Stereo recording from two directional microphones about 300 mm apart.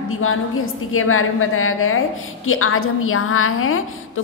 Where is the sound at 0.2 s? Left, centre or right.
Left.